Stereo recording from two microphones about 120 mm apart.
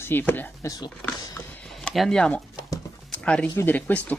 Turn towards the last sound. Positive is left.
turn(degrees=10)  # may be behind; listen again after turning